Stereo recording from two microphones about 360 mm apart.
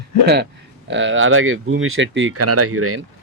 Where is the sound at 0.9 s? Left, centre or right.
Right.